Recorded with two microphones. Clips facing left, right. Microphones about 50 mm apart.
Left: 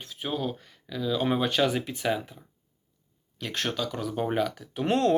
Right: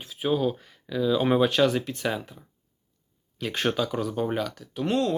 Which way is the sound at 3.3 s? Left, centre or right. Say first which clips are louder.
Right 4 dB; centre.